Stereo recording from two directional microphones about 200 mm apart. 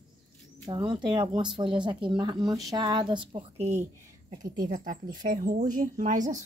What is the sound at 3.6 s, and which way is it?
Speech, 15° right (ahead or behind).